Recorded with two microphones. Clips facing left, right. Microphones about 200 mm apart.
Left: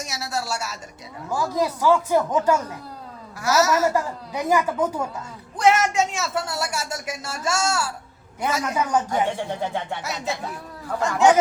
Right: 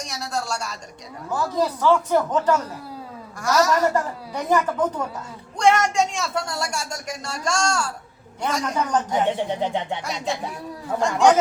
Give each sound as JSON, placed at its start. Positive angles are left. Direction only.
{"t": 0.0, "sound": "a woman's voice", "side_deg": 5}
{"t": 9.5, "sound": "speech", "side_deg": -20}
{"t": 10.0, "sound": "speech", "side_deg": 5}